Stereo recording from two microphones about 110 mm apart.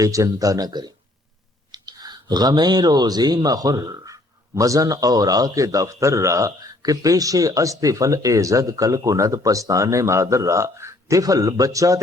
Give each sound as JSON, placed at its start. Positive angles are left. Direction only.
{"t": 0.0, "sound": "speech", "side_deg": -30}